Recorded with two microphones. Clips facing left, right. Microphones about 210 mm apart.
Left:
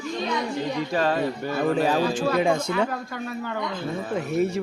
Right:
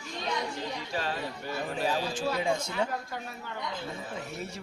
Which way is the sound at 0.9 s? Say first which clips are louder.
Left 11 dB; 90° left.